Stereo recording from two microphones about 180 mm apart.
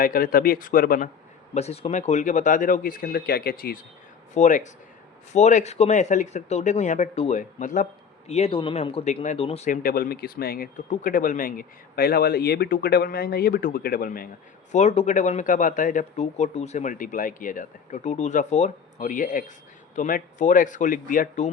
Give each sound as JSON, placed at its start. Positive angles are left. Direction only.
{"t": 0.0, "sound": "speech", "side_deg": 50}
{"t": 1.5, "sound": "speech", "side_deg": 35}
{"t": 4.4, "sound": "speech", "side_deg": 45}
{"t": 8.3, "sound": "speech", "side_deg": 35}
{"t": 9.6, "sound": "speech", "side_deg": 55}
{"t": 14.7, "sound": "speech", "side_deg": 40}